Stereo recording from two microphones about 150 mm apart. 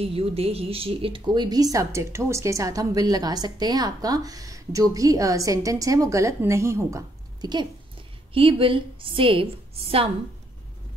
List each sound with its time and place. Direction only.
0.0 s speech: 40° right (ahead or behind); by 7.6 s 25° right (ahead or behind)
8.3 s a woman's voice: 35° right (ahead or behind)